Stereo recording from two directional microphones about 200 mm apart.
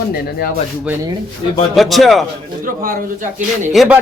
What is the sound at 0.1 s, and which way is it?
Speech, 50° left (ahead or behind).